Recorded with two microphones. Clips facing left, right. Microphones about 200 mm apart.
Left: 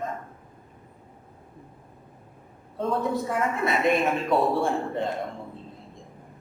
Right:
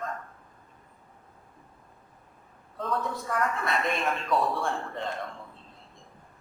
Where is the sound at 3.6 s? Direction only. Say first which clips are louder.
Left 6 dB; 5° left (ahead or behind).